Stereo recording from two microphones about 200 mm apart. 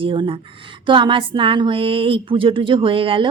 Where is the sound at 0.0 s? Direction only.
25° right (ahead or behind).